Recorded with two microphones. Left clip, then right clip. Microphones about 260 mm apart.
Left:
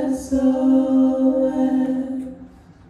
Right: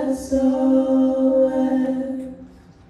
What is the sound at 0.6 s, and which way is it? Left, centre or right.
Mantra, right.